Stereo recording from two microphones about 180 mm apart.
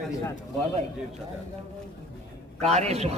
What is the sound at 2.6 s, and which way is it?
Speech, 35° right (ahead or behind).